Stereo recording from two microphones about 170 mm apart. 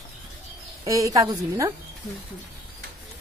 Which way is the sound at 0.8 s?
20° right (ahead or behind).